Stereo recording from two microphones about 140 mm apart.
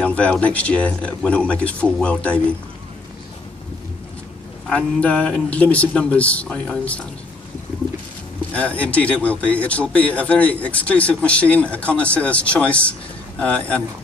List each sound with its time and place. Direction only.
0.0 s speech: 10° left (ahead or behind)
4.6 s speech: 10° left (ahead or behind)
8.5 s speech: 10° left (ahead or behind)